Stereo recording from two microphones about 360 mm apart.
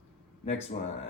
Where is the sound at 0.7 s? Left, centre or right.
Left.